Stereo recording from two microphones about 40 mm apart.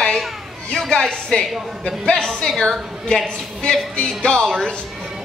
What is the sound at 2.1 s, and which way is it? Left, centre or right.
Speech, centre.